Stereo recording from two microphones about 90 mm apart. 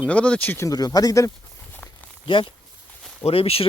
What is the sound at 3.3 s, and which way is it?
Speech, 90° left.